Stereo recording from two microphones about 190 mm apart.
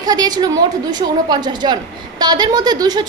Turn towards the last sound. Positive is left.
turn(degrees=-20)  # may be behind; listen again after turning